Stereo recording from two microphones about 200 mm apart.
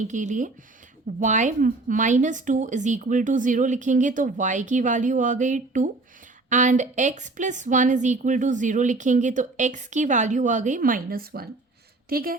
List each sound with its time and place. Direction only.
0.0 s a woman's voice: 40° right (ahead or behind)